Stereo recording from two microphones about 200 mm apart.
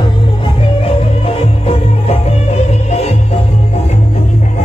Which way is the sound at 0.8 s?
30° left (ahead or behind).